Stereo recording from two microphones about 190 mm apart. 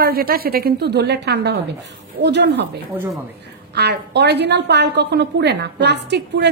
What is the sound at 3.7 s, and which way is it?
A woman's voice, 60° right (ahead or behind).